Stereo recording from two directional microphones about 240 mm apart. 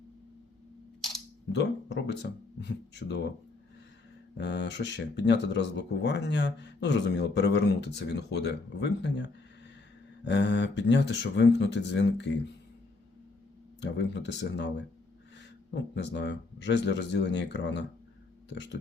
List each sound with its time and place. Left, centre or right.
1.5 s speech: left
4.4 s speech: left
13.8 s speech: left
15.7 s speech: left